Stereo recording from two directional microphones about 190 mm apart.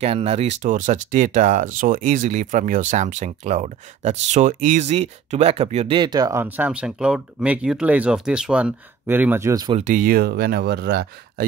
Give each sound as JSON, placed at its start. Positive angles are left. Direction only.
{"t": 0.0, "sound": "speech", "side_deg": -35}
{"t": 6.4, "sound": "speech", "side_deg": -10}
{"t": 9.8, "sound": "speech", "side_deg": -40}